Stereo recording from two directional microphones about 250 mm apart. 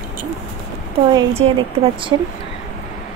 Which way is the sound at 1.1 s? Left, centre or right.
Centre.